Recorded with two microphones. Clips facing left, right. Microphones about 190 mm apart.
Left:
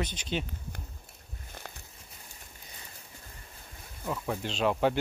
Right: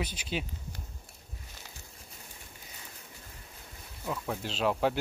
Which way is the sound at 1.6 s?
55° left (ahead or behind).